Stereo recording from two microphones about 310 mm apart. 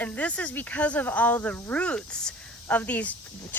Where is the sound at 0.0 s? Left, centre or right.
Centre.